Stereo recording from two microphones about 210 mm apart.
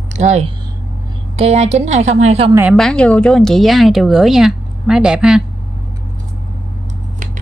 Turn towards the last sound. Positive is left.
turn(degrees=-5)  # may be behind; listen again after turning